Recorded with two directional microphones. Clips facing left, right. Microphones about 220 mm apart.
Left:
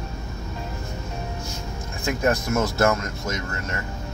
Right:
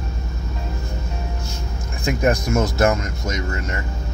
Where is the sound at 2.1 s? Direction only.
15° right (ahead or behind).